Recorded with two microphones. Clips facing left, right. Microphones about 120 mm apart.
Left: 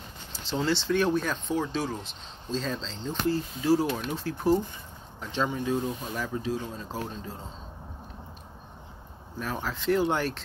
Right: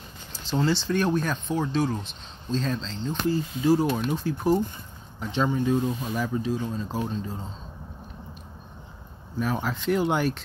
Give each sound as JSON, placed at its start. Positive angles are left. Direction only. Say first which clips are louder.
{"t": 0.6, "sound": "speech", "louder": "right 1 dB", "side_deg": 0}
{"t": 9.4, "sound": "speech", "louder": "right 5 dB", "side_deg": -5}